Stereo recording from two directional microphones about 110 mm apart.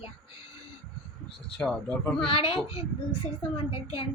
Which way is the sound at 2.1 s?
55° left (ahead or behind).